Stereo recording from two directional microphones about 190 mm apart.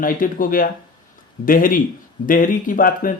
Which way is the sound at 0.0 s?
45° left (ahead or behind).